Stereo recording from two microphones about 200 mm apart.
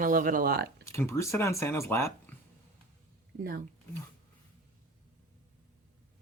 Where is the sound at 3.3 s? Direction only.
40° right (ahead or behind).